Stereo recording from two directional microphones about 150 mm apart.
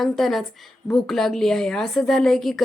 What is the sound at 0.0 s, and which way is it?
Speech, centre (ahead or behind).